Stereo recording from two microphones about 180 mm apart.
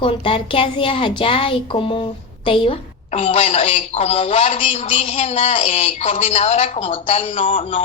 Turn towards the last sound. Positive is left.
turn(degrees=30)  # may be behind; listen again after turning